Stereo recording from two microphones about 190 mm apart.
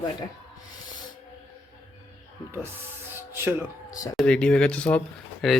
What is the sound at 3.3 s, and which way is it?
Speech, 10° right (ahead or behind).